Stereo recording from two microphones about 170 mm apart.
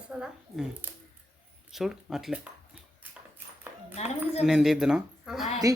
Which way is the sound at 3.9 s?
40° left (ahead or behind).